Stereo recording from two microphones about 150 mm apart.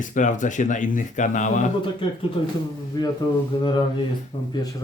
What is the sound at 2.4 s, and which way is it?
Speech, 40° left (ahead or behind).